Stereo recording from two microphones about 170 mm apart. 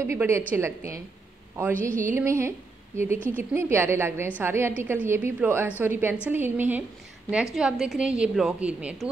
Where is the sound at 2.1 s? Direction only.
15° right (ahead or behind).